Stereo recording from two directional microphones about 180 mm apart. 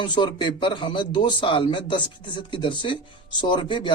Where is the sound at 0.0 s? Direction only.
25° left (ahead or behind).